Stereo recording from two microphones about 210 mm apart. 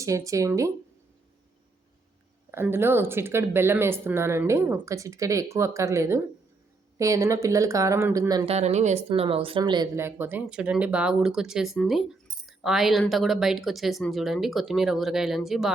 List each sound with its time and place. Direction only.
0.0 s speech: 15° right (ahead or behind)
2.5 s speech: 10° right (ahead or behind)
8.4 s speech: 30° right (ahead or behind); by 15.7 s centre (ahead or behind)